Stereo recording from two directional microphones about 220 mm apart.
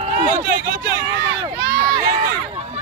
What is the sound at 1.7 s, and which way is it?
Run, 45° right (ahead or behind).